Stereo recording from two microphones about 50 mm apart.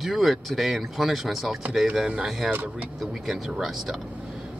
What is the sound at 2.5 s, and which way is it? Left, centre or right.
Speech, right.